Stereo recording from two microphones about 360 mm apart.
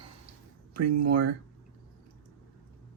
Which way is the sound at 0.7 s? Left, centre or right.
Right.